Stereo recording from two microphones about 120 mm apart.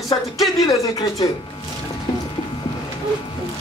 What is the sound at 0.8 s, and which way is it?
Speech, 30° left (ahead or behind).